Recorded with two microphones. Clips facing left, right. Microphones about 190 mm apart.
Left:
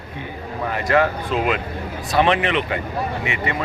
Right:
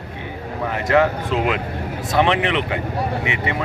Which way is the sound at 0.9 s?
20° right (ahead or behind).